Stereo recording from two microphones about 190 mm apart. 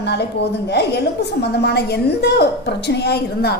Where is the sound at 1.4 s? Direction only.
60° left (ahead or behind).